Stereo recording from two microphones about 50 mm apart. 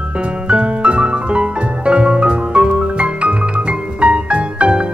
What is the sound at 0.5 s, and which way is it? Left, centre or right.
Music, right.